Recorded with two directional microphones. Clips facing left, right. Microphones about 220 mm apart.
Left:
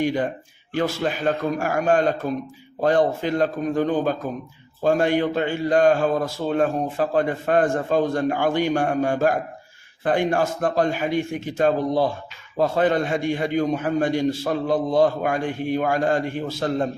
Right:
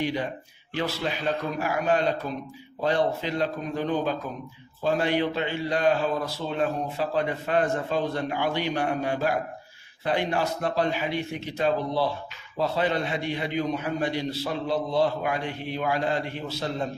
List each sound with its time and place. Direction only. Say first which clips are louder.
0.0 s a man's voice: left 6 dB; 50° left (ahead or behind)